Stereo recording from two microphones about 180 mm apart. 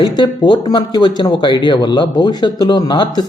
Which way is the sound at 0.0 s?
25° left (ahead or behind).